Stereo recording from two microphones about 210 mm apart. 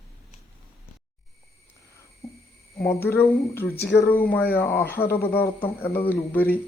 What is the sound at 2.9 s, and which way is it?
Speech, 10° left (ahead or behind).